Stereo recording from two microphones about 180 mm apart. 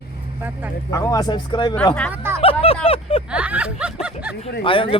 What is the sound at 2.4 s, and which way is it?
Vehicle, 30° left (ahead or behind).